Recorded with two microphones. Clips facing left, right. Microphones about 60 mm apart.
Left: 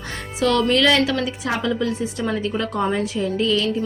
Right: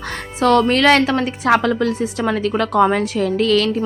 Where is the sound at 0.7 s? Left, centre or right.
Right.